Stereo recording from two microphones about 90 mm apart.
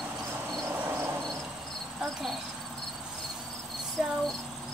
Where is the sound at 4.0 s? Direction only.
5° right (ahead or behind).